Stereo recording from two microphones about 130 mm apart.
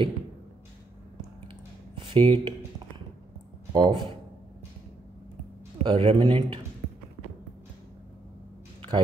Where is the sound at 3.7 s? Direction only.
35° right (ahead or behind).